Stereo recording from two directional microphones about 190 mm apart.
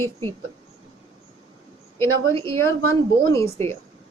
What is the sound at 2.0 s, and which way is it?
A woman's voice, 15° left (ahead or behind).